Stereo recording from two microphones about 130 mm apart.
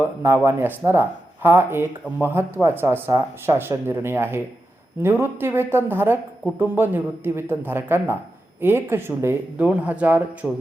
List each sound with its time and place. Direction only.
0.0 s speech: 20° right (ahead or behind)